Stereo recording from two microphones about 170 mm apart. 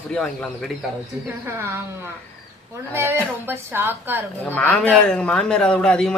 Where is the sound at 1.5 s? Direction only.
15° right (ahead or behind).